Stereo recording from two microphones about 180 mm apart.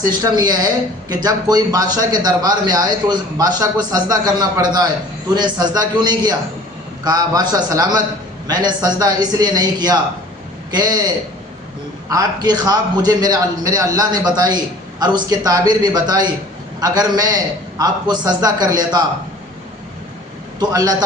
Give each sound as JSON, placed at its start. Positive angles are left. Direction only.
{"t": 0.2, "sound": "a man's voice", "side_deg": -20}
{"t": 20.6, "sound": "a man's voice", "side_deg": -20}